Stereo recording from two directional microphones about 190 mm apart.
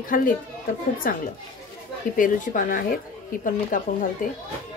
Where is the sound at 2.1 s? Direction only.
45° left (ahead or behind).